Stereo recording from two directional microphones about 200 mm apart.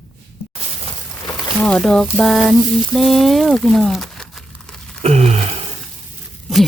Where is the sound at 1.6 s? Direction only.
5° left (ahead or behind).